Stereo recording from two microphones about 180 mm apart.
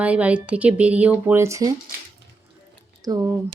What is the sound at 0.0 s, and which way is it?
A woman's voice, 5° right (ahead or behind).